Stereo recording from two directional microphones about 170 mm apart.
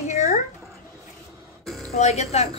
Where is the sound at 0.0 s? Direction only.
40° left (ahead or behind).